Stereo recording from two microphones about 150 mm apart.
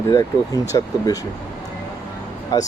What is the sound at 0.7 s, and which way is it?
Speech, 25° left (ahead or behind).